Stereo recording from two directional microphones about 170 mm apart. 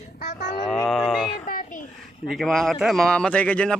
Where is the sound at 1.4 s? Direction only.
55° left (ahead or behind).